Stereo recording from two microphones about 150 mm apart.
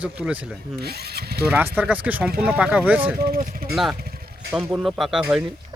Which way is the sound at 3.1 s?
80° right.